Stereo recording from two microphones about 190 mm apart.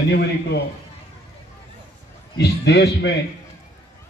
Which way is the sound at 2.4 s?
60° left (ahead or behind).